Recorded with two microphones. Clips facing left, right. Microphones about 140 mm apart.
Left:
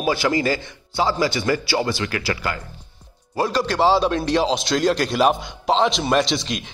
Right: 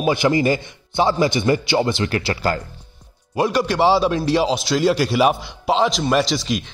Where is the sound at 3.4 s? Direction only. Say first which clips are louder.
Right 2 dB; 10° right (ahead or behind).